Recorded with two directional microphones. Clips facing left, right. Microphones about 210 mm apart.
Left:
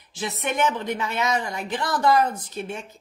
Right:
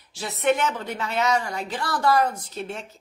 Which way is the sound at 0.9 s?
15° left (ahead or behind).